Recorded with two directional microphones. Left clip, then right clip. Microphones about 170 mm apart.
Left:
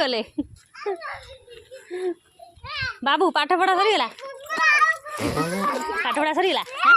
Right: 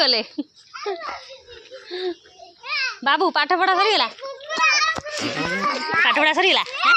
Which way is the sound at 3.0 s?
35° left (ahead or behind).